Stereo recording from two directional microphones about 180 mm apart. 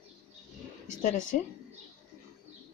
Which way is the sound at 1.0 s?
45° left (ahead or behind).